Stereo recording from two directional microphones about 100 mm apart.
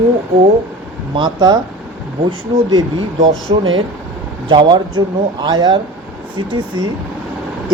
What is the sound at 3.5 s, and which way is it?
Speech, 55° right (ahead or behind).